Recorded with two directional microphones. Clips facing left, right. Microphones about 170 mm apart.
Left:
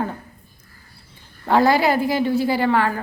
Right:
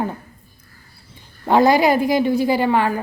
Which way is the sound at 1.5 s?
15° right (ahead or behind).